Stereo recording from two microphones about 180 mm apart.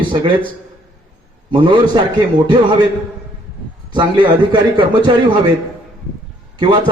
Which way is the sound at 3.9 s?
25° right (ahead or behind).